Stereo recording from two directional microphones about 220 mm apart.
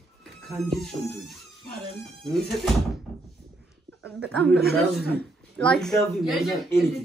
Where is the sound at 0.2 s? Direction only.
Centre (ahead or behind).